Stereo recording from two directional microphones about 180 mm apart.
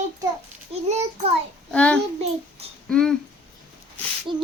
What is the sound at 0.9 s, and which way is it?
Speech, 35° right (ahead or behind).